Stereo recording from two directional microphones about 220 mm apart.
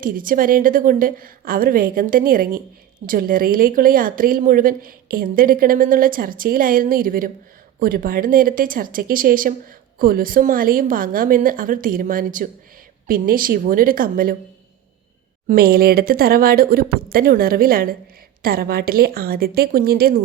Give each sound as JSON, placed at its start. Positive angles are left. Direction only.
{"t": 0.0, "sound": "speech", "side_deg": -40}
{"t": 15.4, "sound": "speech", "side_deg": -40}